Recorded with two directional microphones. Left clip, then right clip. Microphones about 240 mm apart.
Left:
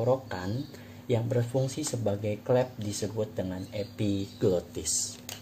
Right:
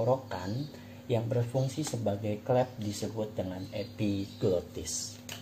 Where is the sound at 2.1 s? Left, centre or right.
Left.